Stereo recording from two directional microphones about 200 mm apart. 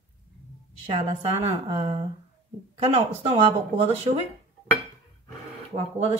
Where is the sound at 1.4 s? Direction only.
25° right (ahead or behind).